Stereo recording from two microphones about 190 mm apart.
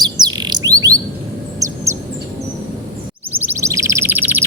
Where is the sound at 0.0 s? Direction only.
20° right (ahead or behind).